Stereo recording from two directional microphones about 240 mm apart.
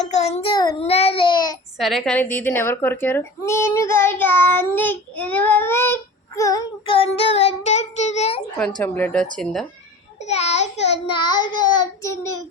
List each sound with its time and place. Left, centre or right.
0.0 s child singing: left
1.8 s a woman's voice: centre; by 8.4 s left
8.7 s a child's voice: centre
10.2 s a sound: left
11.8 s a child's voice: centre